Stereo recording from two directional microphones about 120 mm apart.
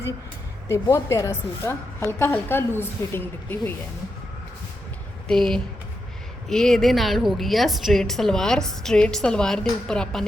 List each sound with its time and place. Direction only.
0.7 s a woman's voice: 25° left (ahead or behind)
5.3 s a woman's voice: 5° left (ahead or behind)